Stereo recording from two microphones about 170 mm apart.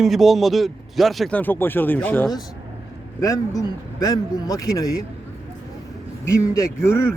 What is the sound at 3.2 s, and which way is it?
Speech, 20° left (ahead or behind).